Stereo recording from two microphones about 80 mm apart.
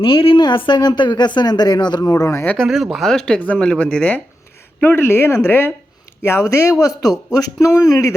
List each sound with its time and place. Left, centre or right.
0.0 s speech: left
2.0 s speech: left
2.6 s speech: centre
4.8 s speech: left